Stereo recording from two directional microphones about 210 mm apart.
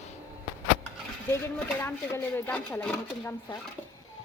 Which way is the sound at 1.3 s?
10° left (ahead or behind).